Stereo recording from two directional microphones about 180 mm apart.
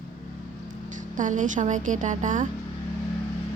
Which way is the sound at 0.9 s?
45° right (ahead or behind).